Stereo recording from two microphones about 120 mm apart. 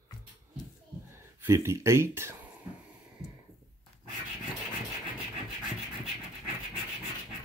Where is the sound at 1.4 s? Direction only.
25° right (ahead or behind).